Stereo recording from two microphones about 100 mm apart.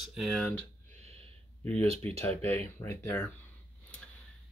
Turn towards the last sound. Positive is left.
turn(degrees=25)  # may be behind; listen again after turning